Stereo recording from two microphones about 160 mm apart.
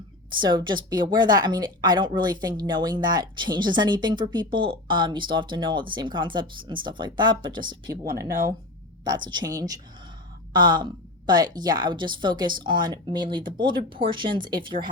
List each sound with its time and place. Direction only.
0.3 s a woman's voice: 30° right (ahead or behind)
9.0 s a woman's voice: 30° right (ahead or behind)